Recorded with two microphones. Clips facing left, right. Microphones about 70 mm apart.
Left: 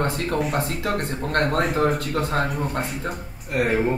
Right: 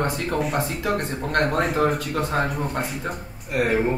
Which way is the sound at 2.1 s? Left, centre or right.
Centre.